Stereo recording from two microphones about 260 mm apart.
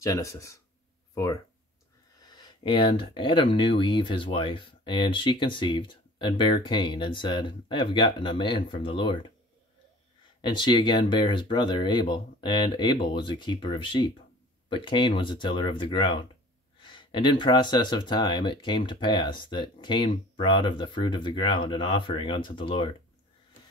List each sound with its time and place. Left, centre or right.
0.0 s speech: centre
10.6 s speech: centre